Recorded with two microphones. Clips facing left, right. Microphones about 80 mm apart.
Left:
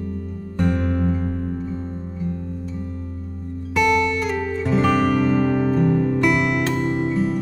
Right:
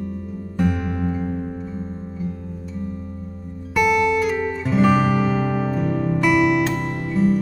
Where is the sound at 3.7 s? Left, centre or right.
Centre.